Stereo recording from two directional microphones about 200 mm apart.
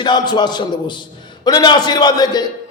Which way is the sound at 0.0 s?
20° left (ahead or behind).